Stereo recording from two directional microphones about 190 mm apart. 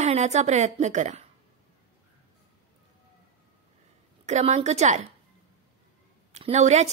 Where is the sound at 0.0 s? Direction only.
35° right (ahead or behind).